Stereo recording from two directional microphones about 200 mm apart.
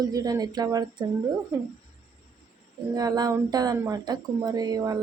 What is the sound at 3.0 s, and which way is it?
A woman's voice, 20° right (ahead or behind).